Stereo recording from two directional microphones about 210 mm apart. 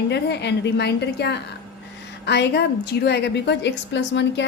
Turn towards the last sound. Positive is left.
turn(degrees=55)  # may be behind; listen again after turning